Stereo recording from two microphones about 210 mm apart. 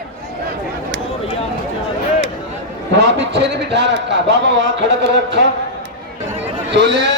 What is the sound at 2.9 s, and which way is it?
A man's voice, 55° right (ahead or behind).